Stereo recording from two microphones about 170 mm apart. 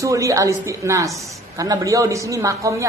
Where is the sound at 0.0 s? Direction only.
20° right (ahead or behind).